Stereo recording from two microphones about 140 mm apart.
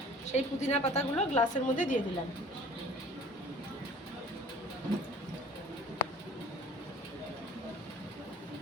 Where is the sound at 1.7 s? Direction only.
65° left (ahead or behind).